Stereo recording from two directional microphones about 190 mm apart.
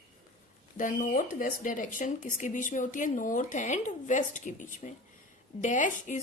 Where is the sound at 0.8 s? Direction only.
45° left (ahead or behind).